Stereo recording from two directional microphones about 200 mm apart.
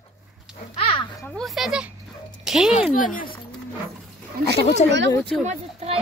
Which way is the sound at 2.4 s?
5° right (ahead or behind).